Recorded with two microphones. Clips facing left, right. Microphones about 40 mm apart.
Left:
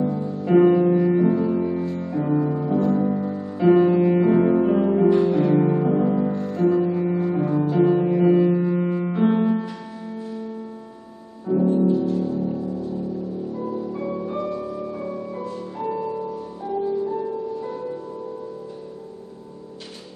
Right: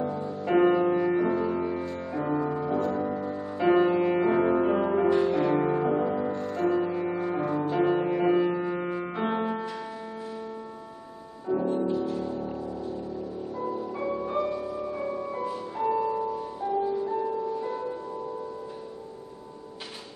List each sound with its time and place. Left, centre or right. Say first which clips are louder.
0.0 s music: left 5 dB; centre
11.4 s music: left 7 dB; centre